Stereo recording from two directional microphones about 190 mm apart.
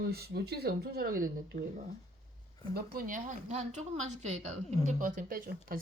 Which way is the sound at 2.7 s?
50° right (ahead or behind).